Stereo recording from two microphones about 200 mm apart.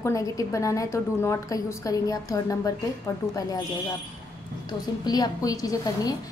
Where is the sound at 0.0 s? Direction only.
15° left (ahead or behind).